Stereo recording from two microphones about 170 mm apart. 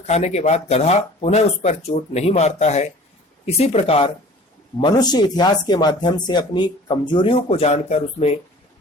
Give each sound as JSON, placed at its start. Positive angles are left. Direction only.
{"t": 0.1, "sound": "speech", "side_deg": 40}
{"t": 4.8, "sound": "speech", "side_deg": 25}